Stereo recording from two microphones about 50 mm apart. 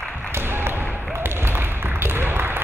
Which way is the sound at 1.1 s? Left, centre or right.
Right.